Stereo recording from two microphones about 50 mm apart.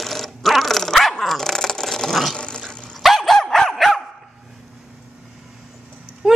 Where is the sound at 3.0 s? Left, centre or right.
Centre.